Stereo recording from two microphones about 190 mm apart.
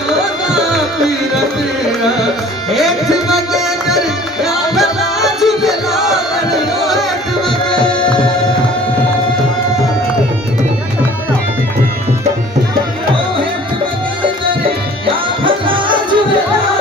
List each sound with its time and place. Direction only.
3.8 s music: centre (ahead or behind)
15.4 s music: 25° right (ahead or behind)